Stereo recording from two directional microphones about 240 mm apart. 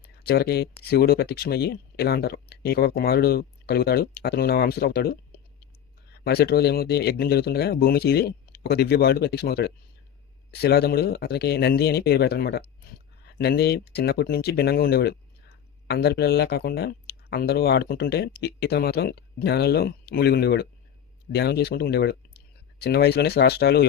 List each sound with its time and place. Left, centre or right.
0.2 s speech: left
5.3 s clicking: left
6.2 s speech: left